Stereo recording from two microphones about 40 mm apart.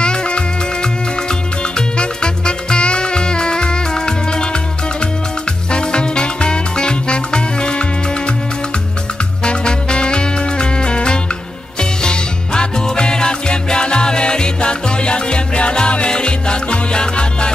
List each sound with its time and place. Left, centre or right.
0.0 s music: left
1.8 s music: left
5.7 s music: left
9.4 s music: left